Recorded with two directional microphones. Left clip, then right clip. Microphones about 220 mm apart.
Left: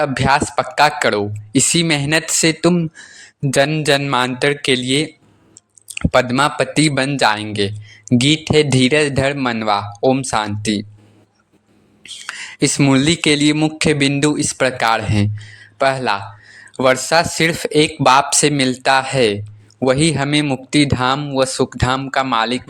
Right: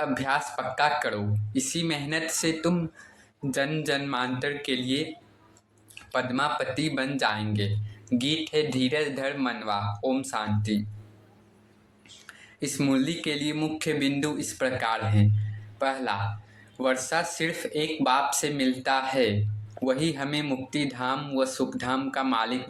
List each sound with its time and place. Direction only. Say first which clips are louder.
0.0 s speech: left 11 dB; 45° left (ahead or behind)
12.0 s speech: left 19 dB; 45° left (ahead or behind)